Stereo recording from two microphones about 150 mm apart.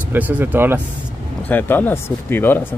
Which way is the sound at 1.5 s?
10° left (ahead or behind).